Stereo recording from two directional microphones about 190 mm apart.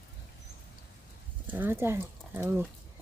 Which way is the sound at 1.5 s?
10° right (ahead or behind).